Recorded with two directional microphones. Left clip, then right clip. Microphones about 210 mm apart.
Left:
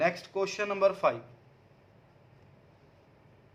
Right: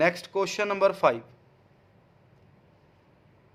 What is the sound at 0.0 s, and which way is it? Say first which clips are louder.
Speech: right 4 dB; 55° right (ahead or behind).